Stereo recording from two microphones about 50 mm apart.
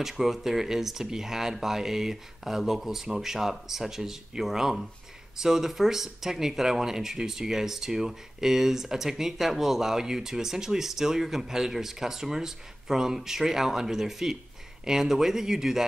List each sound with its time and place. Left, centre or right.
0.0 s speech: centre